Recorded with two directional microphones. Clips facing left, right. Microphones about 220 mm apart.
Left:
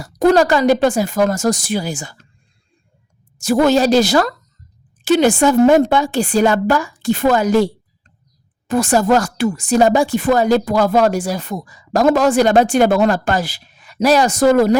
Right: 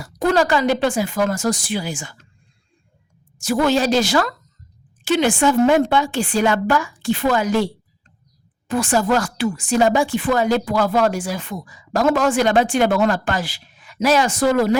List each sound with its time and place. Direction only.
0.0 s speech: 40° left (ahead or behind)
3.3 s speech: 40° left (ahead or behind)